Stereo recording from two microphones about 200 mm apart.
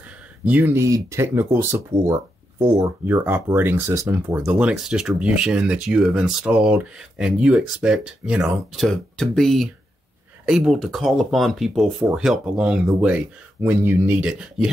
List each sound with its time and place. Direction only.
0.5 s speech: 10° right (ahead or behind)
2.6 s speech: 25° right (ahead or behind)
3.1 s speech: 10° right (ahead or behind)